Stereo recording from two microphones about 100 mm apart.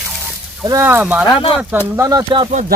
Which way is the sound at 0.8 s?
20° right (ahead or behind).